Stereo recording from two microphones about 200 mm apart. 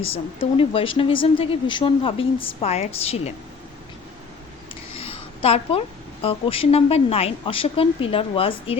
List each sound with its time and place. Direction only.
0.5 s speech: 25° left (ahead or behind)
4.7 s a sound: 30° left (ahead or behind)
6.2 s speech: 30° left (ahead or behind)